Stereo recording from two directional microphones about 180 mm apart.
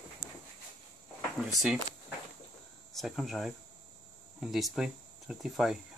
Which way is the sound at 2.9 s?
Centre (ahead or behind).